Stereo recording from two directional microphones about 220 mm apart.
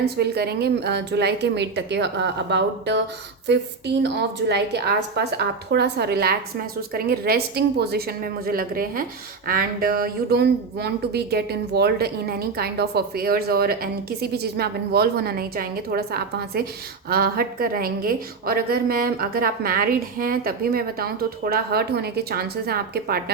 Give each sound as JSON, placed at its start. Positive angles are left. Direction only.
{"t": 0.0, "sound": "speech", "side_deg": -45}